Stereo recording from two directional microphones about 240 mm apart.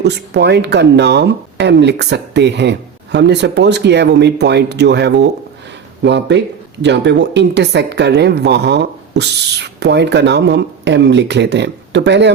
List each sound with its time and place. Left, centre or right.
0.0 s a woman's voice: right